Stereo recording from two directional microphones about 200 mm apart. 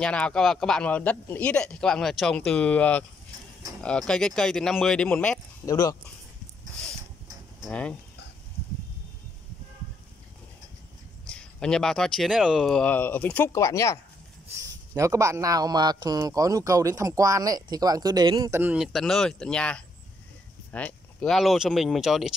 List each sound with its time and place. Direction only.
0.0 s speech: 5° left (ahead or behind)
5.7 s speech: 15° left (ahead or behind)
7.6 s speech: 5° left (ahead or behind)
11.2 s speech: 5° left (ahead or behind)
14.6 s speech: 15° right (ahead or behind)